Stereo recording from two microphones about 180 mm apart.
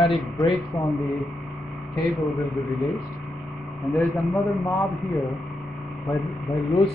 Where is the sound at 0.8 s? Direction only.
Centre (ahead or behind).